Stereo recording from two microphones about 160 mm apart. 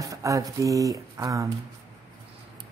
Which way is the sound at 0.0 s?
20° right (ahead or behind).